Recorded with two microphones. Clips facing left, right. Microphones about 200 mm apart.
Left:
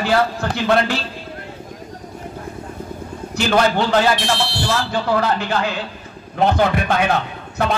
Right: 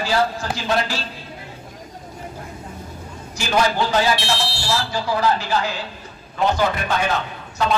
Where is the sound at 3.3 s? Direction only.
60° left (ahead or behind).